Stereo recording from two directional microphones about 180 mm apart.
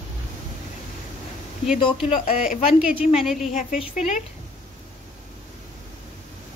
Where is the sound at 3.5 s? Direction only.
45° left (ahead or behind).